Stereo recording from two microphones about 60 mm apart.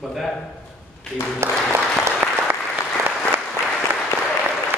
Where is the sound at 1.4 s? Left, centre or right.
Right.